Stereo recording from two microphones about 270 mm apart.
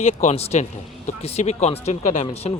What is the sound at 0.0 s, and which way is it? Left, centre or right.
Speech, left.